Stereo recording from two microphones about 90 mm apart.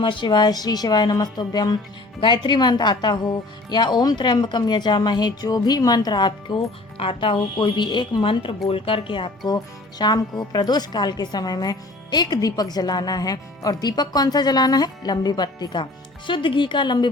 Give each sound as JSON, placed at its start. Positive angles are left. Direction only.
{"t": 0.0, "sound": "a woman's voice", "side_deg": 65}
{"t": 2.2, "sound": "a woman's voice", "side_deg": 60}
{"t": 6.9, "sound": "speech", "side_deg": 90}
{"t": 10.0, "sound": "a woman's voice", "side_deg": 55}